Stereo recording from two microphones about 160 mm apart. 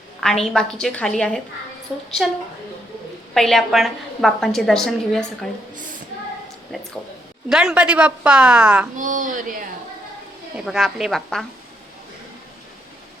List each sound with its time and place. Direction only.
0.2 s a woman's voice: 5° left (ahead or behind)
7.5 s a woman's voice: 5° right (ahead or behind)
9.0 s speech: 50° right (ahead or behind)
10.7 s a woman's voice: centre (ahead or behind)